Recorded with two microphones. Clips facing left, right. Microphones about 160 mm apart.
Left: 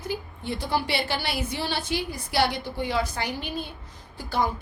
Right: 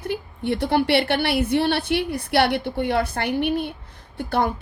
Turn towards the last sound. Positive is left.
turn(degrees=-60)  # may be behind; listen again after turning